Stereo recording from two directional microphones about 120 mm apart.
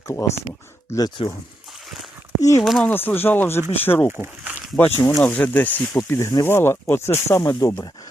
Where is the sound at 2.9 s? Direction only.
15° left (ahead or behind).